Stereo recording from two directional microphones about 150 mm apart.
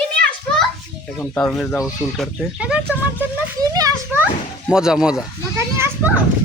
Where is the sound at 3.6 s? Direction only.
25° right (ahead or behind).